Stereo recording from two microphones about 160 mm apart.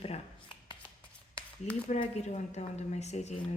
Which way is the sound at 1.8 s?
45° left (ahead or behind).